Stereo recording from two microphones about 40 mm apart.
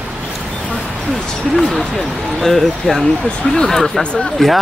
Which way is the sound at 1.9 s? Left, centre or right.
Centre.